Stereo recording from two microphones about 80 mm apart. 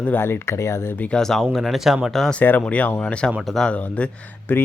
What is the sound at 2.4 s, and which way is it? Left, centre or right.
Speech, left.